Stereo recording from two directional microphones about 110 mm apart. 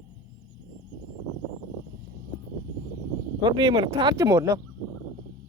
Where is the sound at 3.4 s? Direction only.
40° right (ahead or behind).